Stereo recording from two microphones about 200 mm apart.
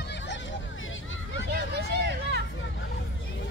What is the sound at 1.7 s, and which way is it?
Hubbub, 55° right (ahead or behind).